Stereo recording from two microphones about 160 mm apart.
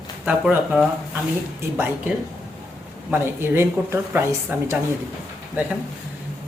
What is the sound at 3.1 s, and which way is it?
A woman's voice, 15° right (ahead or behind).